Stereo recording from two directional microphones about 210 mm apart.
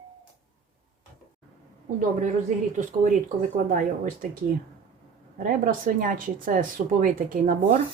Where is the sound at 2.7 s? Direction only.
40° right (ahead or behind).